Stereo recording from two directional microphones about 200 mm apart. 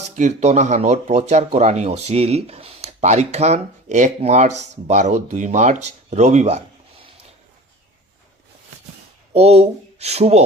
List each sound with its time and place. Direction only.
0.0 s speech: 35° right (ahead or behind)
9.3 s speech: 30° right (ahead or behind)